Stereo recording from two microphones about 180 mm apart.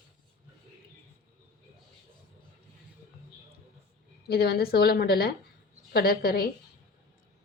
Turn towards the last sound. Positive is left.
turn(degrees=55)  # may be behind; listen again after turning